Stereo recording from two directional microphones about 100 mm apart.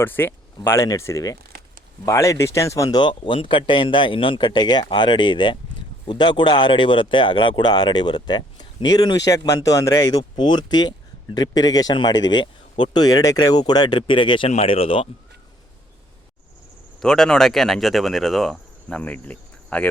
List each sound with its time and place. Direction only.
0.0 s speech: 20° left (ahead or behind); by 15.1 s 70° left (ahead or behind)
17.0 s speech: 5° left (ahead or behind)